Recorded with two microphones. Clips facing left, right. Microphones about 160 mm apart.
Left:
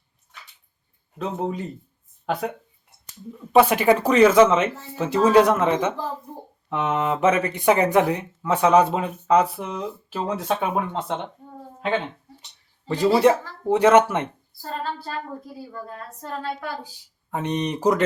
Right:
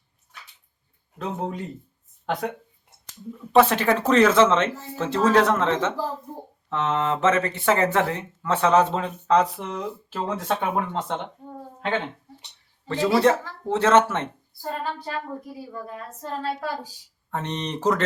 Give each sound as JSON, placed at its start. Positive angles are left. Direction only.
{"t": 1.2, "sound": "speech", "side_deg": 0}
{"t": 13.1, "sound": "speech", "side_deg": 15}
{"t": 14.6, "sound": "a woman's voice", "side_deg": -15}
{"t": 16.4, "sound": "a woman's voice", "side_deg": -35}
{"t": 17.3, "sound": "speech", "side_deg": 10}